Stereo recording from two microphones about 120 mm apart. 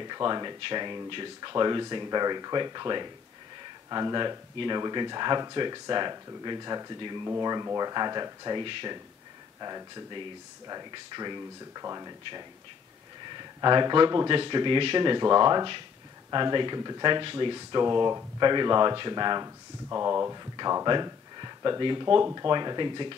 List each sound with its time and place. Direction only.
0.0 s speech: 35° right (ahead or behind)
20.8 s speech: 35° right (ahead or behind)